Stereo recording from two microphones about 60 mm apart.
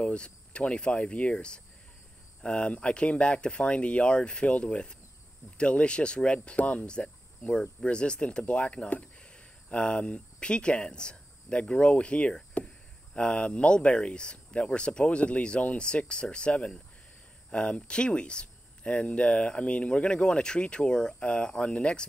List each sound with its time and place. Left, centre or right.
0.0 s speech: centre